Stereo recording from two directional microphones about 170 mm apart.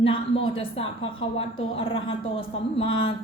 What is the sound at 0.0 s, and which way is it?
A woman's voice, 35° left (ahead or behind).